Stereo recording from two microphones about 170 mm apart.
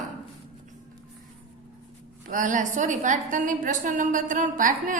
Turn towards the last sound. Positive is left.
turn(degrees=-50)  # may be behind; listen again after turning